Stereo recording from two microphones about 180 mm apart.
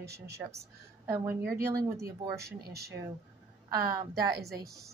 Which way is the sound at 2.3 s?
65° right (ahead or behind).